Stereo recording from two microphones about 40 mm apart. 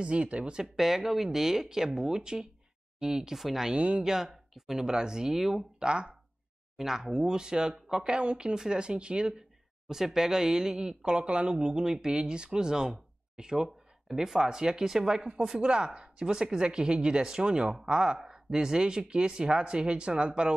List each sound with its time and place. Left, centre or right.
0.0 s speech: right
0.7 s speech: centre
3.3 s speech: centre
3.7 s speech: right
4.0 s speech: centre
5.3 s speech: centre
5.8 s speech: right
6.8 s speech: centre
8.2 s speech: right
9.8 s speech: centre; by 11.5 s right
11.5 s speech: centre